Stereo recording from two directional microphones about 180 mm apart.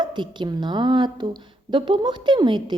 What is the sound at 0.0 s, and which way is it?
A woman's voice, 25° right (ahead or behind).